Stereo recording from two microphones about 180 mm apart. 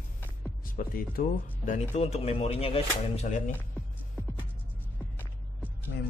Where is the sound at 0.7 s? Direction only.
55° left (ahead or behind).